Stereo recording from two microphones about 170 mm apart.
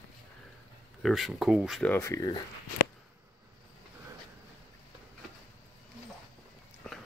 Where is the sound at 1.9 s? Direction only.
15° left (ahead or behind).